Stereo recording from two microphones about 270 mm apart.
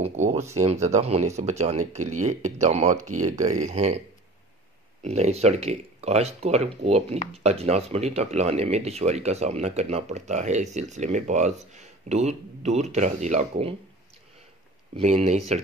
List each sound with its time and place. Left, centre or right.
0.0 s speech: right
5.0 s speech: right
15.0 s speech: right